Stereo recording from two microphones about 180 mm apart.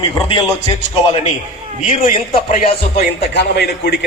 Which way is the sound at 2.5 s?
55° left (ahead or behind).